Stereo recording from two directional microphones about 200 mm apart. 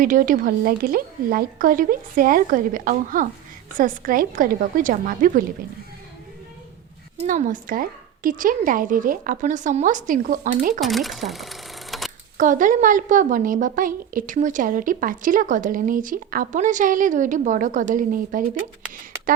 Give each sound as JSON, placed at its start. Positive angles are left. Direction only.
{"t": 0.0, "sound": "speech", "side_deg": -40}
{"t": 7.2, "sound": "a woman's voice", "side_deg": -40}
{"t": 10.8, "sound": "speech", "side_deg": 0}
{"t": 12.4, "sound": "a woman's voice", "side_deg": -40}